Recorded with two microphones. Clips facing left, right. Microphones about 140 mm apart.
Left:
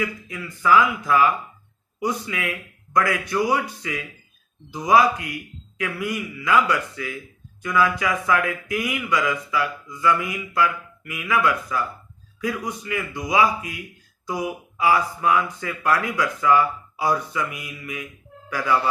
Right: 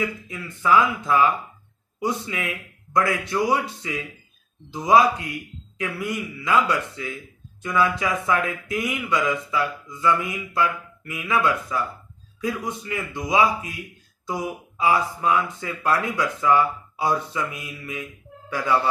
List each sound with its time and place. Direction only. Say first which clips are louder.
0.0 s speech: even; 25° right (ahead or behind)